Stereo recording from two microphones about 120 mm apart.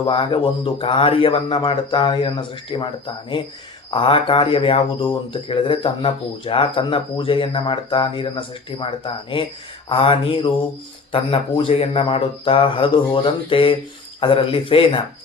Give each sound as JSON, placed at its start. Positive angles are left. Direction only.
{"t": 0.0, "sound": "speech", "side_deg": 45}